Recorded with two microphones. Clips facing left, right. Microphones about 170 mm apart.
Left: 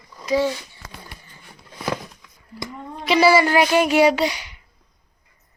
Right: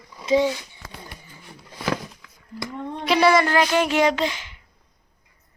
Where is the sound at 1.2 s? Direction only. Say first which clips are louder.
Right 2 dB; 5° right (ahead or behind).